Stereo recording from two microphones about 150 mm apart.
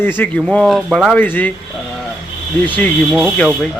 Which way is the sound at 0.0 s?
15° left (ahead or behind).